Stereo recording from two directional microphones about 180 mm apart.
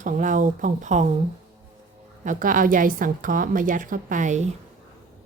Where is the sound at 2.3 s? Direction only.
50° right (ahead or behind).